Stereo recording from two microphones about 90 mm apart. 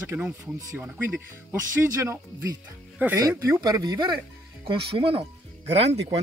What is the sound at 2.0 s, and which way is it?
Speech, 35° right (ahead or behind).